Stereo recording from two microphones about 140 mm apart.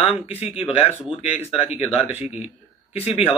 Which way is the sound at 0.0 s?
45° left (ahead or behind).